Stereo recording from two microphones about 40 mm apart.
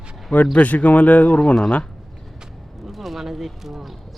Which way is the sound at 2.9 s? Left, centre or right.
Centre.